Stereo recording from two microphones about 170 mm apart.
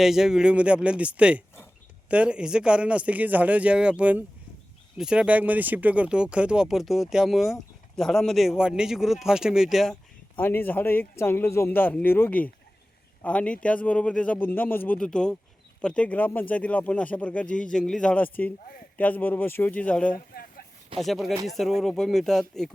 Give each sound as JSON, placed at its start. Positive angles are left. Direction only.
{"t": 0.0, "sound": "speech", "side_deg": 0}
{"t": 10.3, "sound": "speech", "side_deg": 10}
{"t": 20.1, "sound": "a sound", "side_deg": 60}
{"t": 21.0, "sound": "speech", "side_deg": 0}